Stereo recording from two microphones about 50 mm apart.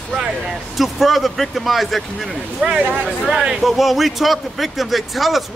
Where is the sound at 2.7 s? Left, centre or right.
Right.